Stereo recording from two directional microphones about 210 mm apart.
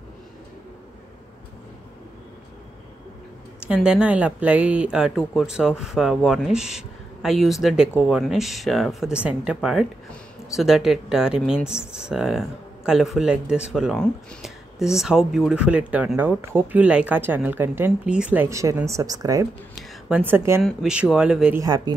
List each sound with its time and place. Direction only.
3.6 s speech: 5° right (ahead or behind)
19.7 s a sound: 5° right (ahead or behind)
20.6 s speech: 5° right (ahead or behind)
21.5 s speech: 20° right (ahead or behind)